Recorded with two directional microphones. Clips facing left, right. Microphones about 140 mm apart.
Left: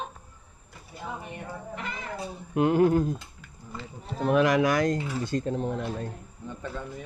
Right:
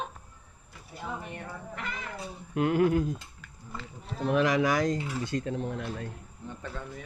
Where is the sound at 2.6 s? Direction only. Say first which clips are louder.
Left 3 dB; 30° left (ahead or behind).